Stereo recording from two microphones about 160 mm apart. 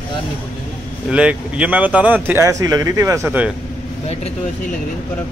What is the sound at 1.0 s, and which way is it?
Speech, 5° right (ahead or behind).